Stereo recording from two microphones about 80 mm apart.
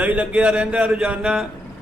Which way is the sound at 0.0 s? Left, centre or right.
Centre.